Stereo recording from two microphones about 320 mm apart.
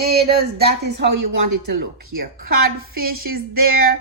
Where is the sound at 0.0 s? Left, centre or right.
Right.